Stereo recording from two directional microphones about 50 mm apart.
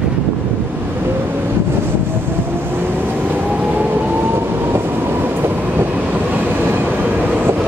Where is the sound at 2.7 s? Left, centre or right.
Right.